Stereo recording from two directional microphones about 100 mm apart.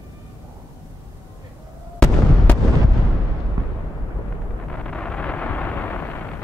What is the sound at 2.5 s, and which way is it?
Artillery fire, 15° left (ahead or behind).